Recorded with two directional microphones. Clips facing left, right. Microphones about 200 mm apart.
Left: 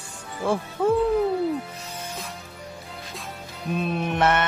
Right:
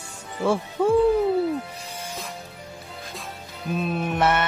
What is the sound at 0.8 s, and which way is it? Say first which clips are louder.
Music: even; 5° left (ahead or behind).